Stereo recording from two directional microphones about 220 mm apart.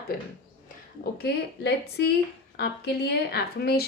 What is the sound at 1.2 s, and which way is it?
A woman's voice, 45° left (ahead or behind).